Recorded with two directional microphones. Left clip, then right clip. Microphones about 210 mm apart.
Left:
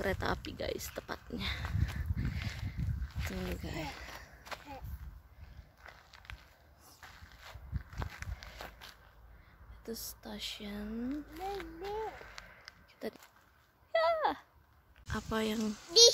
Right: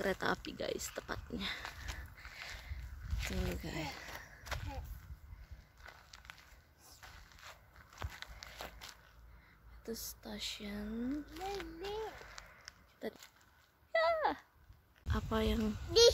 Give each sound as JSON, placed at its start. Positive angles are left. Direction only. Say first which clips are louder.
{"t": 0.0, "sound": "speech", "louder": "left 1 dB", "side_deg": 0}
{"t": 1.6, "sound": "a child's voice", "louder": "left 2 dB", "side_deg": -10}
{"t": 2.1, "sound": "a sound", "louder": "left 4 dB", "side_deg": 5}
{"t": 3.2, "sound": "a sound", "louder": "even", "side_deg": -10}
{"t": 5.9, "sound": "walk", "louder": "left 2 dB", "side_deg": -5}
{"t": 7.4, "sound": "walk", "louder": "left 4 dB", "side_deg": -5}
{"t": 9.8, "sound": "speech", "louder": "left 1 dB", "side_deg": 5}
{"t": 11.3, "sound": "a child's voice", "louder": "left 2 dB", "side_deg": -10}
{"t": 12.4, "sound": "a sound", "louder": "left 3 dB", "side_deg": 0}
{"t": 13.0, "sound": "speech", "louder": "left 2 dB", "side_deg": 10}
{"t": 13.9, "sound": "a sound", "louder": "left 2 dB", "side_deg": 10}
{"t": 15.0, "sound": "speech", "louder": "left 1 dB", "side_deg": 0}
{"t": 15.7, "sound": "speech", "louder": "left 4 dB", "side_deg": -30}